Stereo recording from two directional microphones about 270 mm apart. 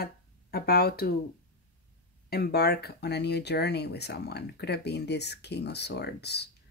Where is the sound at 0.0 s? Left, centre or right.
Left.